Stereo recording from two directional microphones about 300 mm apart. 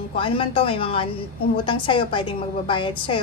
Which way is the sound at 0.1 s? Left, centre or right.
Centre.